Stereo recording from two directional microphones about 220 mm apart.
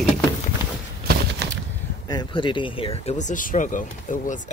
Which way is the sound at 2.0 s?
20° left (ahead or behind).